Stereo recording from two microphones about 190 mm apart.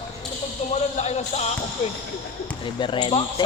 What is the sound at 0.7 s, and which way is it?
Basketball bounce, 35° left (ahead or behind).